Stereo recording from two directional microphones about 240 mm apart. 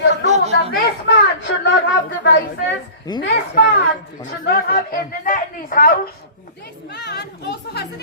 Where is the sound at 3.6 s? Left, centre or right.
Left.